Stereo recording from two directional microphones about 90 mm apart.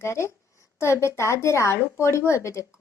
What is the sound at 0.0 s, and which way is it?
A woman's voice, 30° left (ahead or behind).